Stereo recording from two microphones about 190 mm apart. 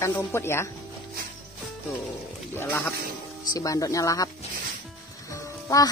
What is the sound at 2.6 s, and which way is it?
Speech, 10° left (ahead or behind).